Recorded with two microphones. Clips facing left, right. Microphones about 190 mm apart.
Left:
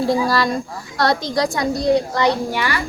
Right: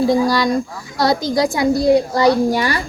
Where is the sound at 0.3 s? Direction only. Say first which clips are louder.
Right 3 dB; centre (ahead or behind).